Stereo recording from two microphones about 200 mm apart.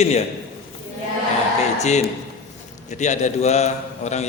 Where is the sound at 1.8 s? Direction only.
35° left (ahead or behind).